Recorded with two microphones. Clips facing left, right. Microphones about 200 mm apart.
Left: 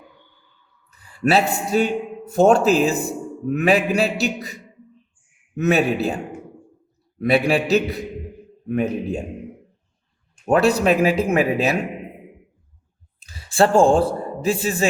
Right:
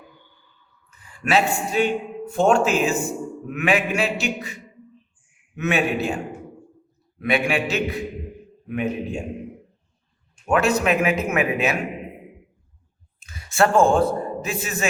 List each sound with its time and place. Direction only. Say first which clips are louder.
0.9 s a man's voice: left 5 dB; 35° left (ahead or behind)
5.5 s speech: left 4 dB; 40° left (ahead or behind)
7.2 s speech: left 4 dB; 35° left (ahead or behind)
10.4 s speech: left 3 dB; 35° left (ahead or behind)
13.1 s a man's voice: left 2 dB; 30° left (ahead or behind)